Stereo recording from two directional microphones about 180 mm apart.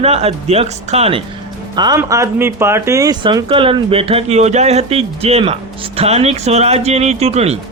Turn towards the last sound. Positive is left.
turn(degrees=-35)  # may be behind; listen again after turning